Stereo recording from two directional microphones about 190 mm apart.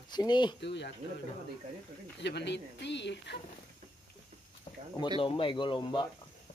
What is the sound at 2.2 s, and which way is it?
Speech, 65° left (ahead or behind).